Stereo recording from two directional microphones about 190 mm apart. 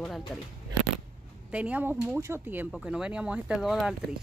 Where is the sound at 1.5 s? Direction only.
5° right (ahead or behind).